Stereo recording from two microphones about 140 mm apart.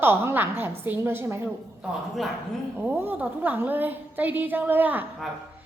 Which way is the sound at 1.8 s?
Centre (ahead or behind).